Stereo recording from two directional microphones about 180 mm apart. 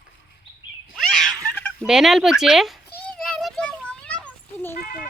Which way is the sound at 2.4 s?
Centre (ahead or behind).